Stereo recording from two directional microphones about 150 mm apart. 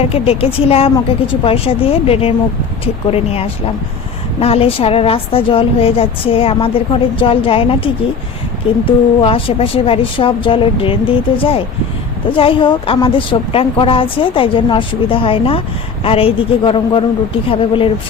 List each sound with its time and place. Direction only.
0.1 s a woman's voice: 40° left (ahead or behind)